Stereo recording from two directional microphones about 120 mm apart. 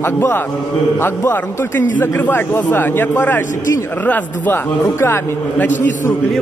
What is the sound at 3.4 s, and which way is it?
Speech, 90° left.